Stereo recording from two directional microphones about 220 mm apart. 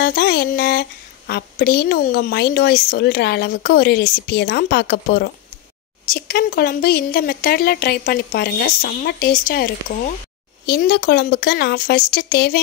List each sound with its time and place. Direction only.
0.0 s speech: 45° left (ahead or behind)